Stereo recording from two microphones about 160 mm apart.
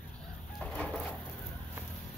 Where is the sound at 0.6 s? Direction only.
10° left (ahead or behind).